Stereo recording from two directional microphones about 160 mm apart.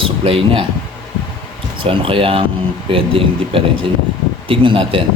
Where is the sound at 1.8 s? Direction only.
35° right (ahead or behind).